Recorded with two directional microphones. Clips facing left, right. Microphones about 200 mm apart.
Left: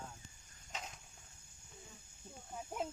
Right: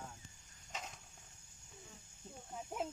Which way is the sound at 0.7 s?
Centre (ahead or behind).